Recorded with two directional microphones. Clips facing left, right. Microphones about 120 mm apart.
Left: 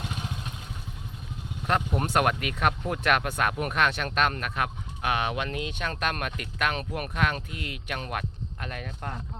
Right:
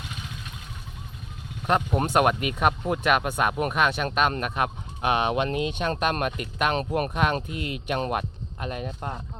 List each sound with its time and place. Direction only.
1.6 s speech: 15° right (ahead or behind)